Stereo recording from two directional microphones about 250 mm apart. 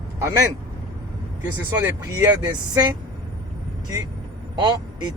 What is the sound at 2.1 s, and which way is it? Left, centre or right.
Speech, centre.